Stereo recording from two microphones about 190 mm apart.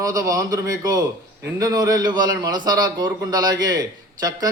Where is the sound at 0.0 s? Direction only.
15° right (ahead or behind).